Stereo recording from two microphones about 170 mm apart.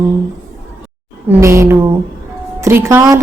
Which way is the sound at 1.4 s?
15° right (ahead or behind).